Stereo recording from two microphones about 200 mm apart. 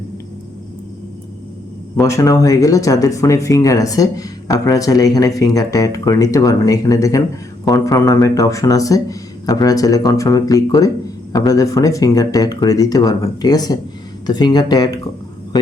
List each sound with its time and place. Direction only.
2.0 s speech: 15° left (ahead or behind)